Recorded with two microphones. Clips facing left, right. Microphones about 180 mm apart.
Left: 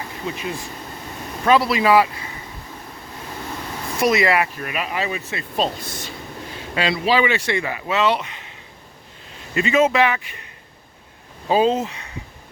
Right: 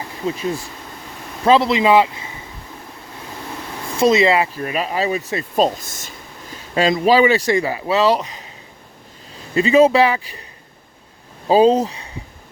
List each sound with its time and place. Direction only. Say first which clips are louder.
1.5 s speech: right 3 dB; 25° right (ahead or behind)
3.9 s speech: right 4 dB; 25° right (ahead or behind)
9.6 s speech: right 5 dB; 35° right (ahead or behind)
11.4 s speech: right 5 dB; 35° right (ahead or behind)